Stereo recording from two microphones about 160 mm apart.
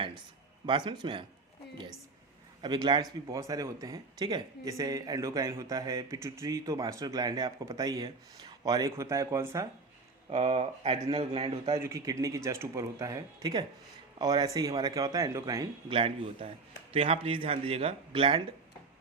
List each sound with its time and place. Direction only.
0.6 s speech: 30° right (ahead or behind)
2.6 s speech: 30° right (ahead or behind)
10.2 s speech: 40° right (ahead or behind)
11.7 s speech: 20° right (ahead or behind)
15.9 s speech: 35° right (ahead or behind)